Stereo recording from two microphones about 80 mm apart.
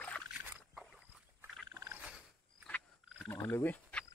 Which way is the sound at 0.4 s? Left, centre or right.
Right.